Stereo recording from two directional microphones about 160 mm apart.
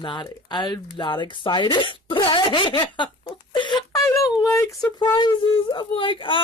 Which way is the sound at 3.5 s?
30° left (ahead or behind).